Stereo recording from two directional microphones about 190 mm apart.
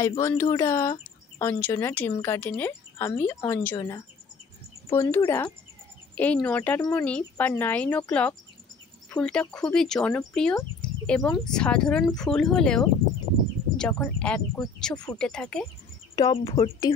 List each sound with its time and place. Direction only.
0.2 s speech: 15° left (ahead or behind)
6.8 s speech: 20° left (ahead or behind)
7.1 s speech: 5° left (ahead or behind)
16.2 s speech: 20° left (ahead or behind)
16.5 s speech: 30° left (ahead or behind)